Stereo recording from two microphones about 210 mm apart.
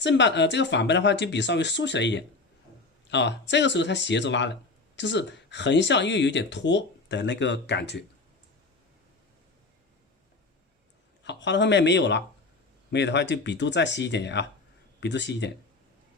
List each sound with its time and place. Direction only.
0.0 s speech: 55° left (ahead or behind)
11.2 s speech: 60° left (ahead or behind)